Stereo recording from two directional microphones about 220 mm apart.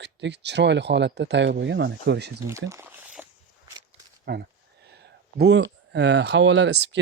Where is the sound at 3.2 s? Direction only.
10° right (ahead or behind).